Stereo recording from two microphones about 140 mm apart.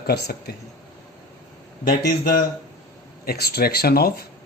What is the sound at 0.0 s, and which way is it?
Speech, 90° left.